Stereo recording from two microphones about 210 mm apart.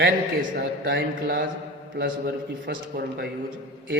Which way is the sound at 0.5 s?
55° right (ahead or behind).